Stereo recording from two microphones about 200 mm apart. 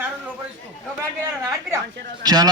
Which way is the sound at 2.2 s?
20° right (ahead or behind).